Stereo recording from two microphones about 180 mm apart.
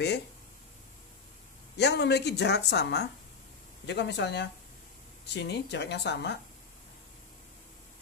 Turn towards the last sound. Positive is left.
turn(degrees=70)  # may be behind; listen again after turning